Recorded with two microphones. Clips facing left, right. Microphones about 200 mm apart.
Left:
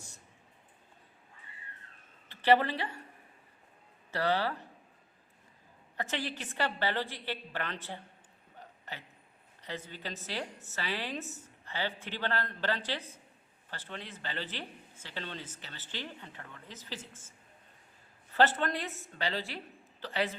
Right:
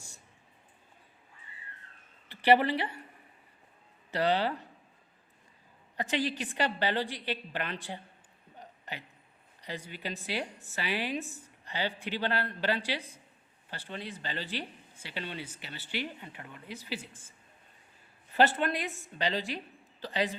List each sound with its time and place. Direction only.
2.3 s a woman's voice: 15° right (ahead or behind)
4.1 s speech: 20° right (ahead or behind)
6.0 s speech: 15° right (ahead or behind)
8.5 s a sound: 15° right (ahead or behind)
9.6 s speech: 10° right (ahead or behind)
18.3 s speech: 15° right (ahead or behind)